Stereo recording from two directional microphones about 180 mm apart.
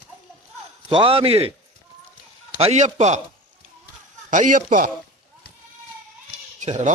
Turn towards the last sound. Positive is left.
turn(degrees=-40)  # may be behind; listen again after turning